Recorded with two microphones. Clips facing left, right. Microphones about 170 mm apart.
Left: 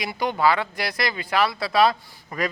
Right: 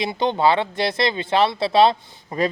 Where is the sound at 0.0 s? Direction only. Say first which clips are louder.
Right 3 dB; 25° right (ahead or behind).